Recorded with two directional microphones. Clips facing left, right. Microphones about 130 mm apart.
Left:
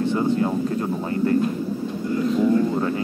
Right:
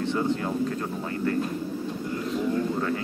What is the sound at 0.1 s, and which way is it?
Speech, 15° left (ahead or behind).